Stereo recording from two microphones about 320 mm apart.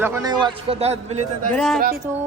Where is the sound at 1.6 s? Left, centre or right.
Centre.